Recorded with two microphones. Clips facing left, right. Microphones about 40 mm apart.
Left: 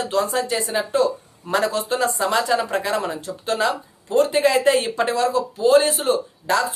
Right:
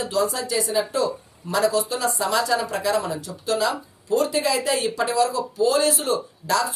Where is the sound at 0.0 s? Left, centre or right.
Left.